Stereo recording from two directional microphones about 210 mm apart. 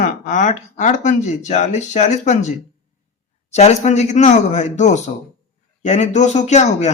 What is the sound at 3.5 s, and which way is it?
Speech, 30° left (ahead or behind).